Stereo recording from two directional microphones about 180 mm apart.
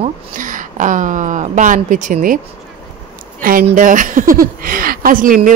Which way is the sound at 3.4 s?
50° right (ahead or behind).